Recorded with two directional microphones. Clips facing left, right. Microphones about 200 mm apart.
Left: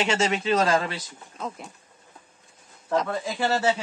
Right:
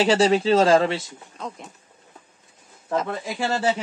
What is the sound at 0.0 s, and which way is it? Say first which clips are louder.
Speech: right 6 dB; 35° right (ahead or behind).